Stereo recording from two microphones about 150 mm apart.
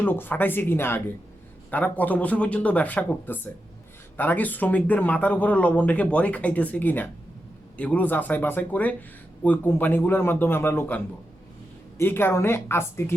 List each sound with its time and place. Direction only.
0.0 s speech: 15° left (ahead or behind)